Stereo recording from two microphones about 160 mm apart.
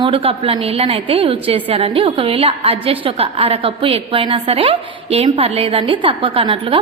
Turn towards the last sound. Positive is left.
turn(degrees=-35)  # may be behind; listen again after turning